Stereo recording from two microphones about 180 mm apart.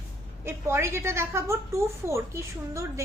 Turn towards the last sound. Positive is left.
turn(degrees=-15)  # may be behind; listen again after turning